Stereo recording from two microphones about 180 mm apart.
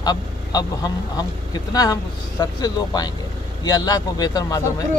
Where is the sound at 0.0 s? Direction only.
20° left (ahead or behind).